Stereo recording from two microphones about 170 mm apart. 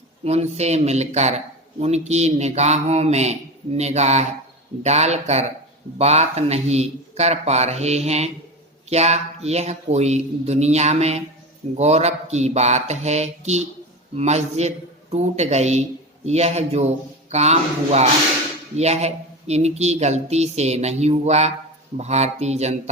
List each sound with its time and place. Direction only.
0.3 s speech: 40° right (ahead or behind)